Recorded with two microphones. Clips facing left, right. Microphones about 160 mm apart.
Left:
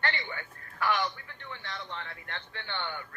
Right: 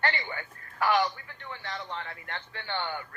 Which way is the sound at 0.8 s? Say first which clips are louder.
Right 4 dB; 45° right (ahead or behind).